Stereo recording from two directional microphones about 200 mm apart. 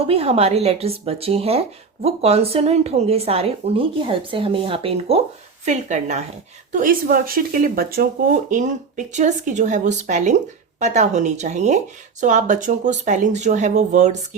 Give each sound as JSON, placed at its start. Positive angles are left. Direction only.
{"t": 0.1, "sound": "speech", "side_deg": -30}
{"t": 6.7, "sound": "speech", "side_deg": -45}